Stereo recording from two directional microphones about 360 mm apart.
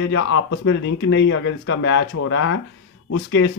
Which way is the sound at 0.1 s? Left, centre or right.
Left.